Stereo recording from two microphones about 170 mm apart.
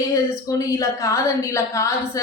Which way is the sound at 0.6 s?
20° left (ahead or behind).